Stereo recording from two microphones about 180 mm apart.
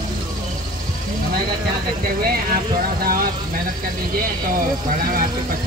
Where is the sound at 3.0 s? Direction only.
55° right (ahead or behind).